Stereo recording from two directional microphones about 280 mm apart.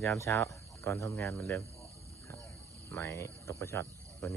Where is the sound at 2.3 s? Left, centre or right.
Centre.